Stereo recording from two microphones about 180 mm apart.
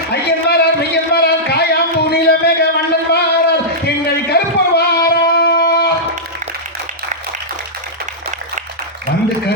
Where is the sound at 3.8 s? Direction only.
65° left (ahead or behind).